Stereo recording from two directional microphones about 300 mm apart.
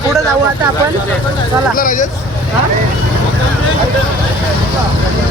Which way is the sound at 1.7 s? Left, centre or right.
Left.